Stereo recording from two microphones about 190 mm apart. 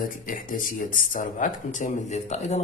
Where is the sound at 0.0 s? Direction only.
45° left (ahead or behind).